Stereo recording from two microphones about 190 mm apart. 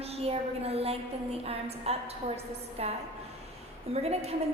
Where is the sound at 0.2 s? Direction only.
30° right (ahead or behind).